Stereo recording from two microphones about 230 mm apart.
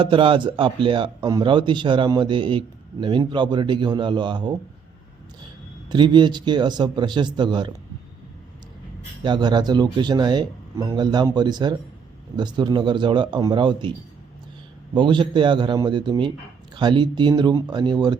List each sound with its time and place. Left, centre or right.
0.0 s a man's voice: right
5.9 s a man's voice: centre
9.2 s a man's voice: centre
14.9 s a man's voice: centre